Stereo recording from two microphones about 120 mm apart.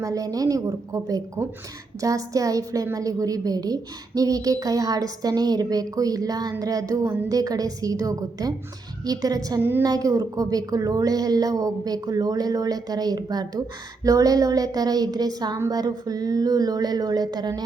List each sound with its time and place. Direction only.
0.0 s a woman's voice: 30° right (ahead or behind)
9.6 s a woman's voice: 15° right (ahead or behind)
9.8 s speech: 30° right (ahead or behind)